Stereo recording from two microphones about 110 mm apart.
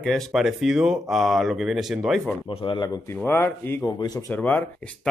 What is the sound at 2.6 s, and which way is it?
Speech, 45° left (ahead or behind).